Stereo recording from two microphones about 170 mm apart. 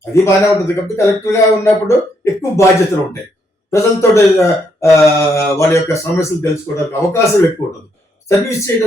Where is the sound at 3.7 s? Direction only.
15° left (ahead or behind).